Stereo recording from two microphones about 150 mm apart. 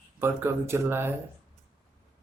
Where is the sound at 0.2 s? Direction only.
15° right (ahead or behind).